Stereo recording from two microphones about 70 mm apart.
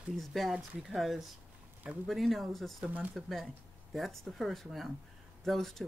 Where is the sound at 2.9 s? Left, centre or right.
Right.